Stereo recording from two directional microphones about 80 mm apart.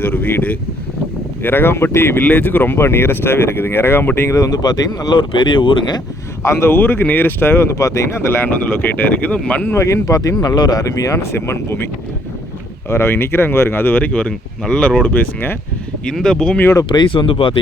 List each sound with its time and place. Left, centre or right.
0.0 s speech: left
4.4 s speech: left
5.1 s speech: left
6.4 s speech: left
8.3 s speech: left
9.7 s speech: left
12.9 s speech: left
16.0 s speech: centre
16.9 s speech: left